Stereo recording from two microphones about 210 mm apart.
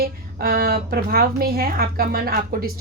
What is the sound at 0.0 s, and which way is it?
A woman's voice, 45° right (ahead or behind).